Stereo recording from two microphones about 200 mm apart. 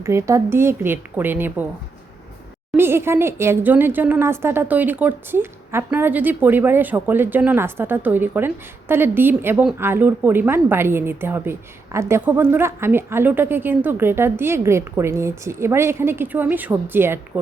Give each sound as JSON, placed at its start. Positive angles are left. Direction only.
{"t": 0.0, "sound": "a woman's voice", "side_deg": -15}
{"t": 2.7, "sound": "a woman's voice", "side_deg": -10}